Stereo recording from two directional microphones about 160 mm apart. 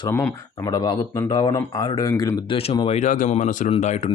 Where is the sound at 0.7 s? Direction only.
25° left (ahead or behind).